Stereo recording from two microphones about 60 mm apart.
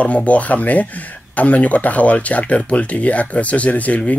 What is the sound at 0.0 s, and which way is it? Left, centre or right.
Speech, left.